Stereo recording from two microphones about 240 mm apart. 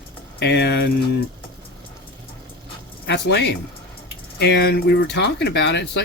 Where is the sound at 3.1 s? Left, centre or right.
Left.